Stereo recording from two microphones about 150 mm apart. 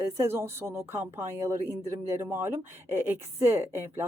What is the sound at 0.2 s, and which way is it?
Speech, 15° right (ahead or behind).